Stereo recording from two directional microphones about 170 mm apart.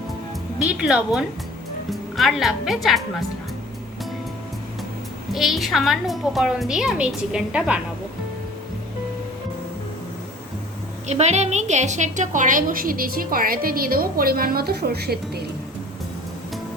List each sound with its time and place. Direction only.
0.7 s a woman's voice: 5° right (ahead or behind)
5.3 s a woman's voice: centre (ahead or behind)
11.1 s a woman's voice: 40° right (ahead or behind); by 15.4 s 70° right (ahead or behind)